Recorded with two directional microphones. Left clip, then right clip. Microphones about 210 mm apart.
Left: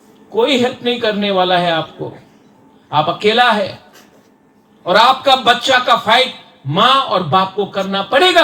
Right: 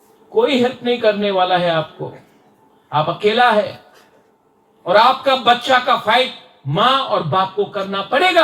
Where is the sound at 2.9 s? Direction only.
50° left (ahead or behind).